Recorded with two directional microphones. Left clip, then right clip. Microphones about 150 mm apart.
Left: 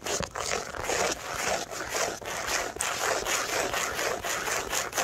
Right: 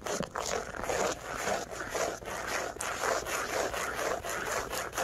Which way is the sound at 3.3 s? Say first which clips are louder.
Left 4 dB; 40° left (ahead or behind).